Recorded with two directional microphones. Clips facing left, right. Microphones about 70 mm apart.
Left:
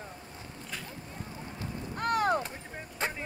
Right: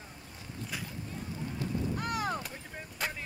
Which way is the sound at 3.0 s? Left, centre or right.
Left.